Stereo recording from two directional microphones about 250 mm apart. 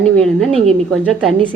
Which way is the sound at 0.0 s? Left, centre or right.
Centre.